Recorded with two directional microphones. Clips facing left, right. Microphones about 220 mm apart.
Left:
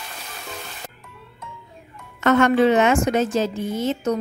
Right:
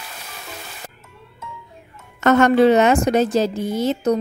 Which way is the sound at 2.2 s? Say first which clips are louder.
Right 3 dB; 40° right (ahead or behind).